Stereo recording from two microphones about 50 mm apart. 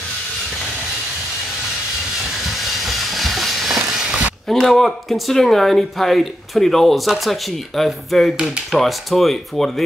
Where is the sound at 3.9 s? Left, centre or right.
Centre.